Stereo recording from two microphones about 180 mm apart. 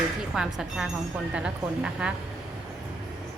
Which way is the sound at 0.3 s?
5° right (ahead or behind).